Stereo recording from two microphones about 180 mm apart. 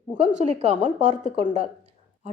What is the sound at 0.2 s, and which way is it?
A woman's voice, 35° right (ahead or behind).